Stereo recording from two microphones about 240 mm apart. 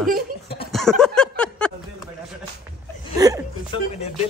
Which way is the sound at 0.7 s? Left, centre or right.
Centre.